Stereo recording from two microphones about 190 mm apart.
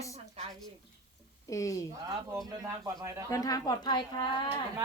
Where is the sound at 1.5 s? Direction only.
15° left (ahead or behind).